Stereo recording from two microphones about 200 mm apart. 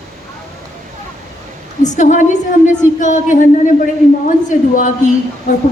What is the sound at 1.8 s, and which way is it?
A woman's voice, 40° left (ahead or behind).